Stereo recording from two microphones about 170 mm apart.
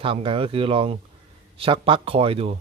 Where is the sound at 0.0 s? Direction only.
30° right (ahead or behind).